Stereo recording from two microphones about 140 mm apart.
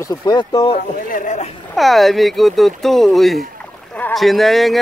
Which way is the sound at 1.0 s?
65° left (ahead or behind).